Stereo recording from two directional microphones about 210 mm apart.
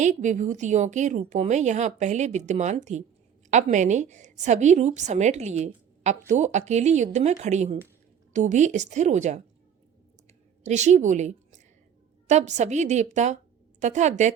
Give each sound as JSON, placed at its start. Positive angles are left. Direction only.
{"t": 0.0, "sound": "a woman's voice", "side_deg": -35}
{"t": 10.6, "sound": "a woman's voice", "side_deg": -35}